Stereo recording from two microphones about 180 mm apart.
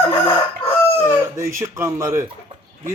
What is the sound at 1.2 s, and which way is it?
Speech, 15° right (ahead or behind).